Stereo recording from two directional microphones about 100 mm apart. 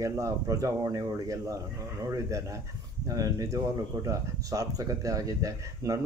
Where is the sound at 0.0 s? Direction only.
35° right (ahead or behind).